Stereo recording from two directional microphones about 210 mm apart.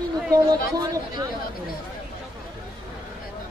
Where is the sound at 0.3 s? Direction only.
20° right (ahead or behind).